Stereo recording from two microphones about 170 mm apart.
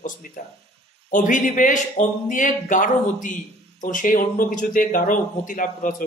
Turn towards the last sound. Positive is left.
turn(degrees=50)  # may be behind; listen again after turning